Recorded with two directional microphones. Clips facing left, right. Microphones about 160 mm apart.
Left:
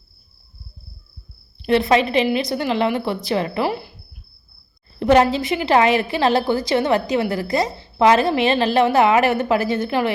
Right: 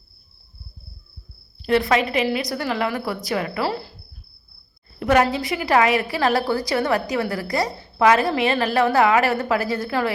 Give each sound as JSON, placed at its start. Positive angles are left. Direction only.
{"t": 1.6, "sound": "a woman's voice", "side_deg": 25}
{"t": 4.9, "sound": "a woman's voice", "side_deg": 25}